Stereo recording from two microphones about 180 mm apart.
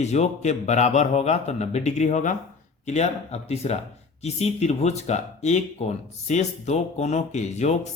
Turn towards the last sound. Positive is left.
turn(degrees=40)  # may be behind; listen again after turning